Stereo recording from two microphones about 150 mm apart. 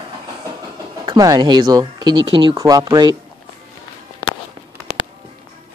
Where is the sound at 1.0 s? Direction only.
25° right (ahead or behind).